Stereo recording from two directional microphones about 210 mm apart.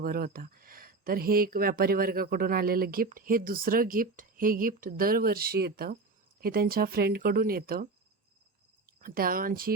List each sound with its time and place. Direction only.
0.0 s speech: 45° right (ahead or behind)
8.9 s speech: 45° right (ahead or behind)